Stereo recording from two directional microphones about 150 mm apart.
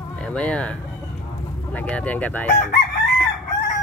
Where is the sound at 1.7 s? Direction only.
10° left (ahead or behind).